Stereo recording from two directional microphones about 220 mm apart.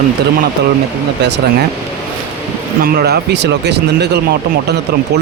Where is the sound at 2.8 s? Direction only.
45° right (ahead or behind).